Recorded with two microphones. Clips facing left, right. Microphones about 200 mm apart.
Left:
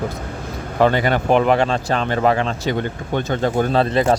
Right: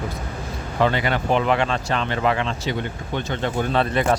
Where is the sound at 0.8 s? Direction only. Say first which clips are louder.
Left 5 dB; 45° left (ahead or behind).